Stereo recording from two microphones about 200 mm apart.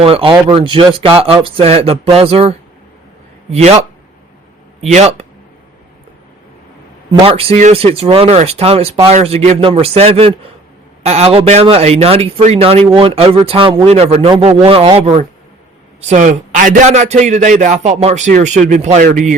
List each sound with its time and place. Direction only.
0.0 s a man's voice: 25° right (ahead or behind)
7.3 s a man's voice: 30° right (ahead or behind)